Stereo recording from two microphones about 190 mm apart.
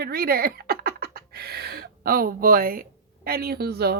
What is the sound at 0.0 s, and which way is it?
A woman's voice, 55° right (ahead or behind).